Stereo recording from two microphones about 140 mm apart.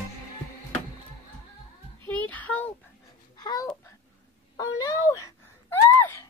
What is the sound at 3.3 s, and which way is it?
Babbling, 30° left (ahead or behind).